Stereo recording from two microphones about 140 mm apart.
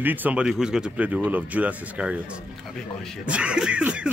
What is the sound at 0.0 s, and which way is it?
Speech, 15° right (ahead or behind).